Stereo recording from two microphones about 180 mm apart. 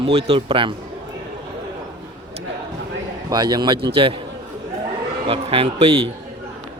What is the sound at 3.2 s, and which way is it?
Speech, 25° right (ahead or behind).